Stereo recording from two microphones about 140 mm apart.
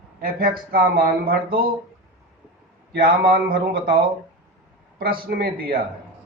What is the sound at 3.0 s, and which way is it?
Speech, 90° right.